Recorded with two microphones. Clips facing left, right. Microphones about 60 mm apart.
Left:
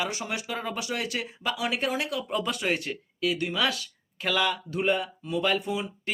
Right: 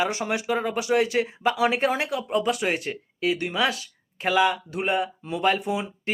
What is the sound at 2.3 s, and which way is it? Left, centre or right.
Speech, centre.